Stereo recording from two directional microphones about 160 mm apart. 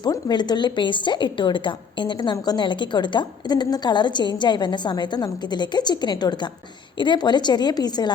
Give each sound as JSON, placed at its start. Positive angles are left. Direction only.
{"t": 0.0, "sound": "a woman's voice", "side_deg": 25}